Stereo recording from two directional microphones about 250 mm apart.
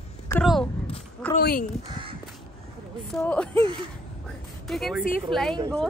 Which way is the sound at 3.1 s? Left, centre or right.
Centre.